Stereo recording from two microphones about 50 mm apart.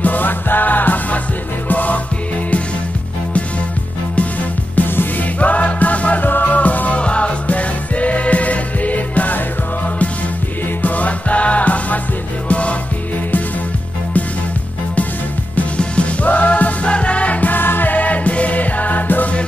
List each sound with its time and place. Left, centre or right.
0.0 s music: left
4.1 s music: left
10.8 s music: left
15.5 s music: left